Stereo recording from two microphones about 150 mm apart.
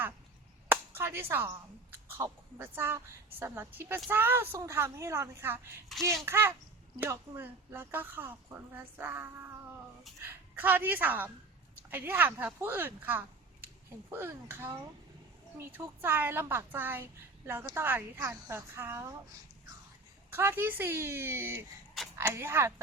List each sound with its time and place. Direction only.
0.7 s a woman's voice: 15° right (ahead or behind)
20.3 s a woman's voice: 15° right (ahead or behind)